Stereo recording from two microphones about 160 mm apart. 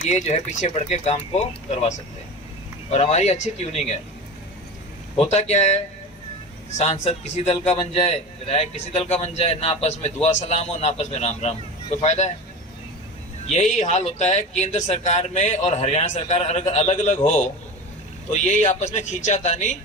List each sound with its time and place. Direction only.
0.1 s speech: 45° left (ahead or behind)
5.1 s a man's voice: 40° left (ahead or behind)
13.5 s speech: 45° left (ahead or behind)